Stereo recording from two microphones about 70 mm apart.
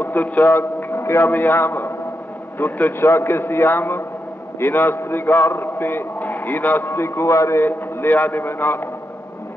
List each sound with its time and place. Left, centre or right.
0.0 s a man's voice: left
7.6 s a man's voice: left